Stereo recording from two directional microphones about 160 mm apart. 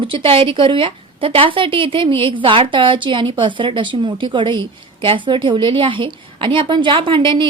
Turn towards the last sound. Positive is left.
turn(degrees=-30)  # may be behind; listen again after turning